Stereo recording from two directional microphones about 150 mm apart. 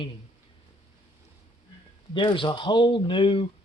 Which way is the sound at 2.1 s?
35° left (ahead or behind).